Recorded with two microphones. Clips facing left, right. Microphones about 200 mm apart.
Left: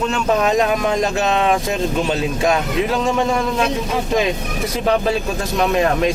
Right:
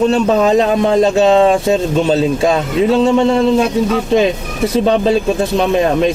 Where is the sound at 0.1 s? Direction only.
30° right (ahead or behind).